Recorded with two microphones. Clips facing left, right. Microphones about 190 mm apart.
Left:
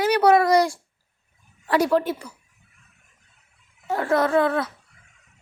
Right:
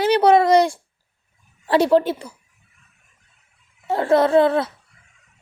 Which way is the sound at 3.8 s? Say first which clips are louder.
Right 5 dB; 30° right (ahead or behind).